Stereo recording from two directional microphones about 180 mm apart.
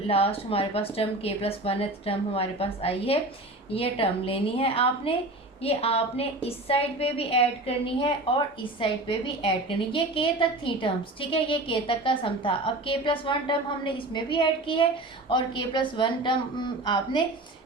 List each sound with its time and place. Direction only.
0.1 s a woman's voice: 30° left (ahead or behind)